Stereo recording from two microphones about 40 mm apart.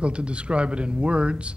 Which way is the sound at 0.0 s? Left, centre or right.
Right.